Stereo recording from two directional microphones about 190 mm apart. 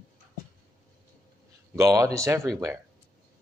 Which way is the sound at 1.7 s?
15° right (ahead or behind).